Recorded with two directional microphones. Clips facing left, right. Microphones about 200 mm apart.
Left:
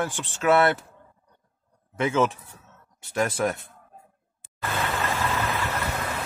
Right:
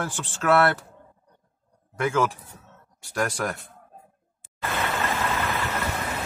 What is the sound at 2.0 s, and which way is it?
Speech, 25° left (ahead or behind).